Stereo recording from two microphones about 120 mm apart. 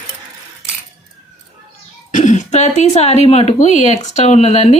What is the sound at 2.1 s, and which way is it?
Speech, 90° left.